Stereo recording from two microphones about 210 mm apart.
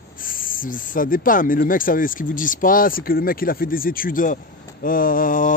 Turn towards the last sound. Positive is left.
turn(degrees=40)  # may be behind; listen again after turning